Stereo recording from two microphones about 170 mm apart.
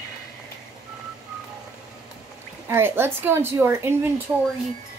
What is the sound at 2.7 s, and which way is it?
A woman's voice, 15° right (ahead or behind).